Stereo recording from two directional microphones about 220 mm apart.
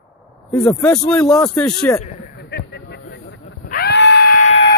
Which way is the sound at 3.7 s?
45° left (ahead or behind).